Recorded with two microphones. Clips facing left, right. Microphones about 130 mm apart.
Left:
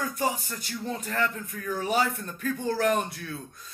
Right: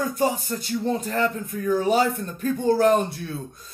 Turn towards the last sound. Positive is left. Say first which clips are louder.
# right 6 dB
turn(degrees=-30)  # may be behind; listen again after turning